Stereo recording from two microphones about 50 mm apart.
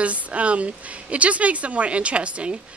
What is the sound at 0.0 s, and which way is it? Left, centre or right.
A woman's voice, right.